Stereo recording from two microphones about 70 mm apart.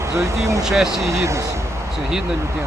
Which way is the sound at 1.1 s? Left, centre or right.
Right.